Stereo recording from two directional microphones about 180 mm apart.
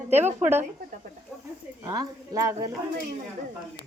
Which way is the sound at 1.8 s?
20° right (ahead or behind).